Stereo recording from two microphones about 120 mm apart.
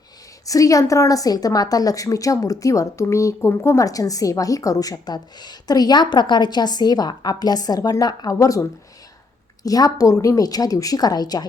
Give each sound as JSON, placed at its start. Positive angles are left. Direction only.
{"t": 0.4, "sound": "a woman's voice", "side_deg": 30}
{"t": 9.6, "sound": "a woman's voice", "side_deg": 30}